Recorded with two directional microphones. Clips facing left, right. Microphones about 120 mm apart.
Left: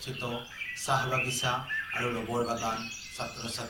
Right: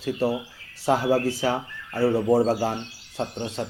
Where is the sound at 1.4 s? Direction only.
45° right (ahead or behind).